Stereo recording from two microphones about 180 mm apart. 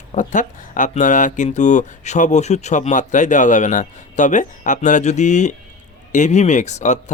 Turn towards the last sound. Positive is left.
turn(degrees=40)  # may be behind; listen again after turning